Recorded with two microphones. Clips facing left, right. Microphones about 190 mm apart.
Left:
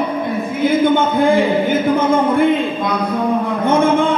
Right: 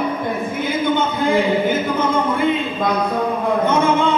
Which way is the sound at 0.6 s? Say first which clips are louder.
Left 7 dB; 50° left (ahead or behind).